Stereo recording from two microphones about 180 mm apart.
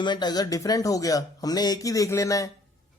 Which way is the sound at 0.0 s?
25° left (ahead or behind).